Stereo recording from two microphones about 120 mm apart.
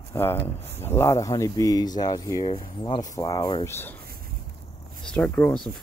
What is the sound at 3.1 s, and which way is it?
Speech, 30° left (ahead or behind).